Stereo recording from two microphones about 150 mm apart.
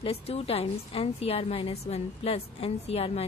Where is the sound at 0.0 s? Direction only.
40° left (ahead or behind).